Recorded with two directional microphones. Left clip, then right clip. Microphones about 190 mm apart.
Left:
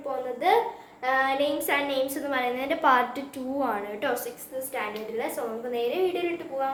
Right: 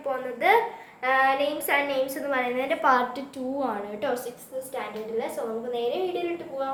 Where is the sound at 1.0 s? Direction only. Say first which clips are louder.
Right 2 dB; 10° left (ahead or behind).